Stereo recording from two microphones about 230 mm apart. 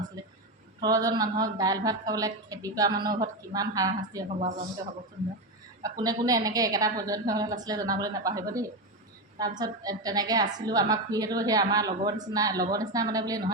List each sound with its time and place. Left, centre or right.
0.2 s a sound: centre
0.8 s a woman's voice: centre
5.8 s a woman's voice: centre